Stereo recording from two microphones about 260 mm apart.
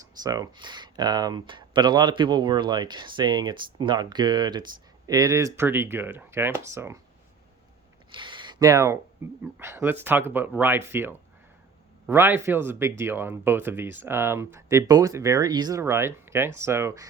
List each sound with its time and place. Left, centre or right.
0.0 s speech: centre
8.1 s a sound: centre
9.4 s speech: centre